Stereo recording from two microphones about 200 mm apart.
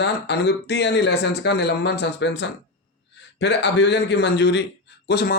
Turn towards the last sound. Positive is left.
turn(degrees=50)  # may be behind; listen again after turning